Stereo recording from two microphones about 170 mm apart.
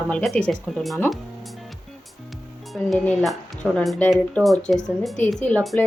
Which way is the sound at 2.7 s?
Centre (ahead or behind).